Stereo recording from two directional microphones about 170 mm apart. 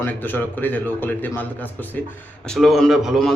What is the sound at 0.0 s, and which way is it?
A man's voice, 10° left (ahead or behind).